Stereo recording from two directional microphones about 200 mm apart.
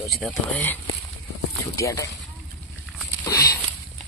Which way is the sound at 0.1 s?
5° left (ahead or behind).